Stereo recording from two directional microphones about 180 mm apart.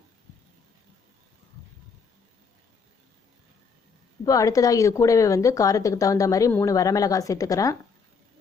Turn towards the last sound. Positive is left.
turn(degrees=20)  # may be behind; listen again after turning